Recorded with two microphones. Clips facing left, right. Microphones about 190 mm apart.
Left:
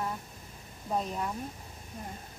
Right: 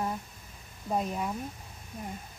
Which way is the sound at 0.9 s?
10° right (ahead or behind).